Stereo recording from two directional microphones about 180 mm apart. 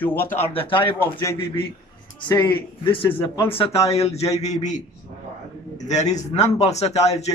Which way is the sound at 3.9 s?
35° left (ahead or behind).